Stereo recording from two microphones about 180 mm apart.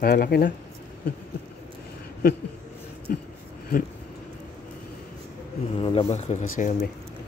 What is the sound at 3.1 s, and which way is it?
Speech, 55° left (ahead or behind).